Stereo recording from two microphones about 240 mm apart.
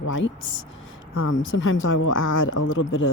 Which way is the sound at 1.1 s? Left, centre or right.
Left.